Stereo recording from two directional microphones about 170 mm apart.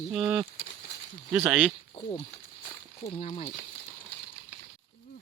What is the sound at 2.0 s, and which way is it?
Speech, 25° left (ahead or behind).